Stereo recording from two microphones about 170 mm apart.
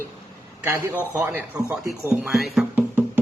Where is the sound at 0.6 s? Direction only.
10° right (ahead or behind).